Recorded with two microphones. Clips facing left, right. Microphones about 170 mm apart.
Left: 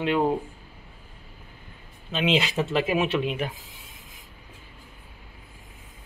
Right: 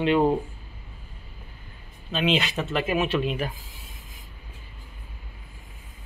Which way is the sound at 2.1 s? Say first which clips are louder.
Left 1 dB; 20° left (ahead or behind).